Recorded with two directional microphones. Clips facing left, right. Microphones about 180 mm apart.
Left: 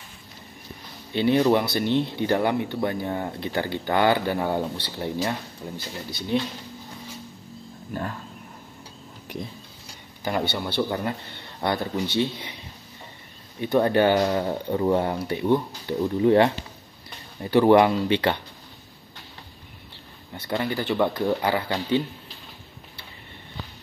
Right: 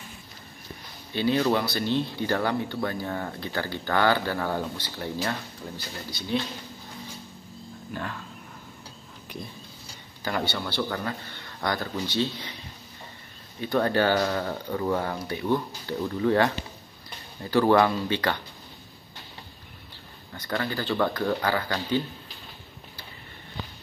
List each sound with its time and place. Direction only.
1.1 s speech: 20° left (ahead or behind)
7.9 s speech: 35° left (ahead or behind)
10.5 s speech: 20° left (ahead or behind)
13.6 s speech: 20° left (ahead or behind)
20.3 s speech: 20° left (ahead or behind)